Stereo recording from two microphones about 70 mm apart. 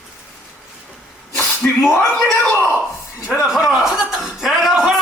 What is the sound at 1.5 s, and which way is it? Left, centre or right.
Speech, centre.